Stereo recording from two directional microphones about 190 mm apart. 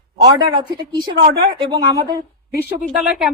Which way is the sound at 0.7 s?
20° right (ahead or behind).